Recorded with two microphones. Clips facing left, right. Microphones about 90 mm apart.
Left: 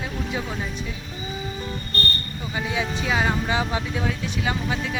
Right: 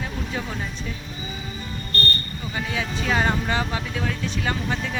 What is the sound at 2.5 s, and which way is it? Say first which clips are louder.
Speech: left 2 dB; 15° left (ahead or behind).